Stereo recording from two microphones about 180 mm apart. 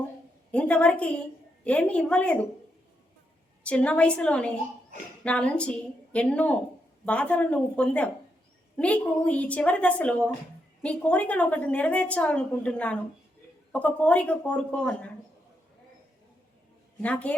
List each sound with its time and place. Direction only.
0.5 s a woman's voice: 5° left (ahead or behind)
3.6 s a woman's voice: 5° left (ahead or behind)
17.0 s a woman's voice: 5° left (ahead or behind)